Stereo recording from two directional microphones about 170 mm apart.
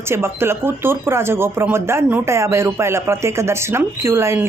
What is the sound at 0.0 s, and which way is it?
A woman's voice, 15° right (ahead or behind).